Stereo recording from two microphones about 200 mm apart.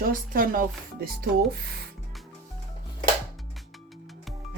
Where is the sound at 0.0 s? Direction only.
45° right (ahead or behind).